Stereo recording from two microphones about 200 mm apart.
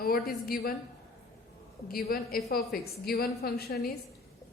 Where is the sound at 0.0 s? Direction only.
50° left (ahead or behind).